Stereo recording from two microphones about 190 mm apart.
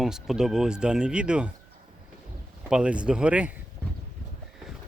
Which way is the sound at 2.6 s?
5° right (ahead or behind).